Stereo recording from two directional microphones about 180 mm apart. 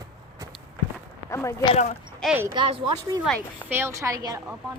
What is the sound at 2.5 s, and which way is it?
Speech, 30° right (ahead or behind).